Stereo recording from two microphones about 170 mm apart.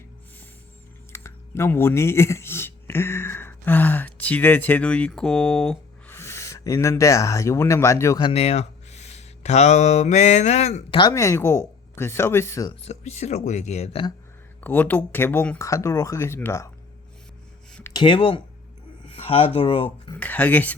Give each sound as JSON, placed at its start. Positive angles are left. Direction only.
{"t": 1.1, "sound": "speech", "side_deg": 15}
{"t": 6.1, "sound": "speech", "side_deg": 15}
{"t": 8.2, "sound": "speech", "side_deg": 35}
{"t": 10.9, "sound": "speech", "side_deg": 20}
{"t": 12.8, "sound": "speech", "side_deg": 40}
{"t": 14.6, "sound": "speech", "side_deg": 10}
{"t": 17.7, "sound": "a sound", "side_deg": 5}
{"t": 17.9, "sound": "speech", "side_deg": 30}
{"t": 20.1, "sound": "speech", "side_deg": 10}